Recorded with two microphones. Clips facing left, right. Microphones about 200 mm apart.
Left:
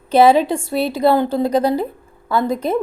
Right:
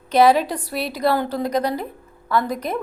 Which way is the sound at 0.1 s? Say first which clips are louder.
Left 4 dB; 25° left (ahead or behind).